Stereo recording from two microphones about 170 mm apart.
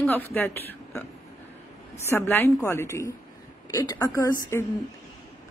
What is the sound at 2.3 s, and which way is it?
A woman's voice, 15° left (ahead or behind).